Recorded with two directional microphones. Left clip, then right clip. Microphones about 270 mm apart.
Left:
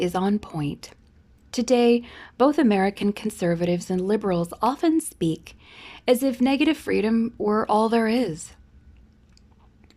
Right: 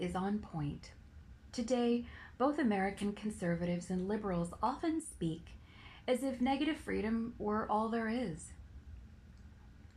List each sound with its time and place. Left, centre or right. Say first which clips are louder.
0.0 s a woman's voice: left 14 dB; left